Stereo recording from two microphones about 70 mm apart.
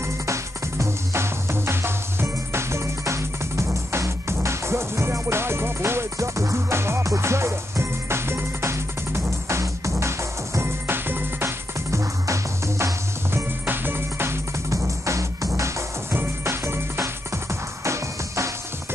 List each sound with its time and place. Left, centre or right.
0.0 s music: right
13.7 s music: right
14.7 s music: right
16.1 s music: right